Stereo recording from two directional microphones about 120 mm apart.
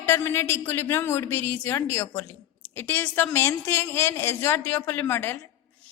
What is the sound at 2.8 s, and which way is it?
A woman's voice, 15° left (ahead or behind).